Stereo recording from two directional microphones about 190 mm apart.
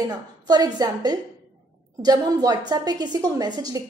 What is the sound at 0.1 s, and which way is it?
A woman's voice, 20° right (ahead or behind).